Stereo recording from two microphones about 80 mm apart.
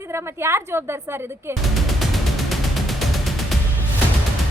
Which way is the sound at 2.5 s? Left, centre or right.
Centre.